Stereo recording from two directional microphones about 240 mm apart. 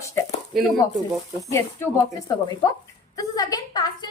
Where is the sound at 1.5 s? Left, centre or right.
Centre.